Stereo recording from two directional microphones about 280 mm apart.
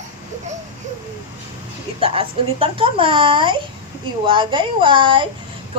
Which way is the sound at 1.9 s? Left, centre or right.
Centre.